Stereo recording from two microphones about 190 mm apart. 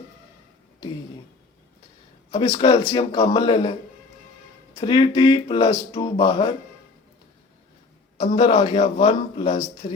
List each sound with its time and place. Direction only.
2.3 s speech: 30° left (ahead or behind)
8.2 s speech: 30° left (ahead or behind)